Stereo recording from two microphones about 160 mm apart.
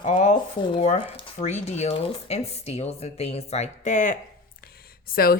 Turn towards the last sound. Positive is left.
turn(degrees=70)  # may be behind; listen again after turning